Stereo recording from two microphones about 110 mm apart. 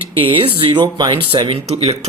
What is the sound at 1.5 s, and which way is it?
Speech, 70° right (ahead or behind).